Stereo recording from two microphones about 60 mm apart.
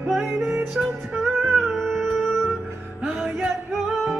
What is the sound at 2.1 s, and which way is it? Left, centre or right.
Music, centre.